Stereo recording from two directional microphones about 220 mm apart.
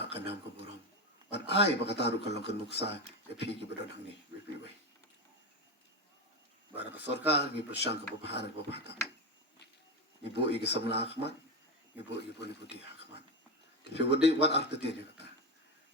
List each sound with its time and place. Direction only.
0.0 s a sound: 50° left (ahead or behind)
1.3 s speech: 50° left (ahead or behind)
7.3 s speech: 50° left (ahead or behind)
10.2 s speech: 50° left (ahead or behind)
13.8 s speech: 50° left (ahead or behind)